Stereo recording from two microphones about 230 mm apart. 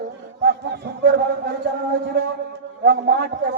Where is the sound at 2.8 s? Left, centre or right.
Right.